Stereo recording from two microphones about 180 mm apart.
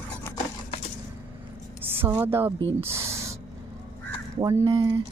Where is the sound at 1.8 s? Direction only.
10° right (ahead or behind).